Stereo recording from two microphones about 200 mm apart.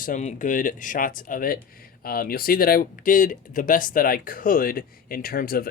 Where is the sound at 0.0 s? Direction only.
40° left (ahead or behind).